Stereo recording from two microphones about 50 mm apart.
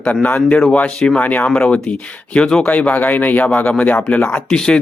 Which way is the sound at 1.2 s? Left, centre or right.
Left.